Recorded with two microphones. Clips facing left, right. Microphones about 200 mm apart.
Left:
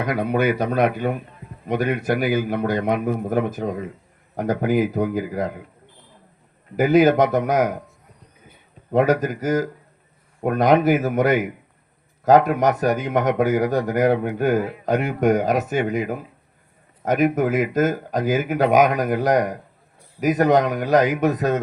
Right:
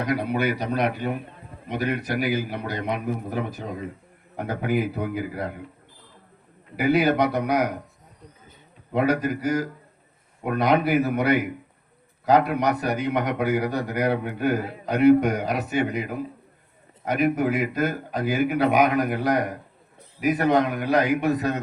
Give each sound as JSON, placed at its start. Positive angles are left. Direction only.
{"t": 0.0, "sound": "a man's voice", "side_deg": 50}
{"t": 6.7, "sound": "a man's voice", "side_deg": 45}
{"t": 8.9, "sound": "a man's voice", "side_deg": 45}